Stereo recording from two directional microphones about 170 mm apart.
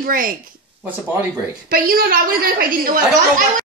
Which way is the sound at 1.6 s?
60° right (ahead or behind).